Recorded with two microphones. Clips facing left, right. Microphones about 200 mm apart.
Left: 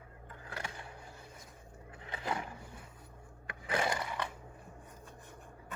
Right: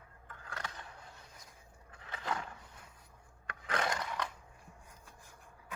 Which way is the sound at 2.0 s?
15° left (ahead or behind).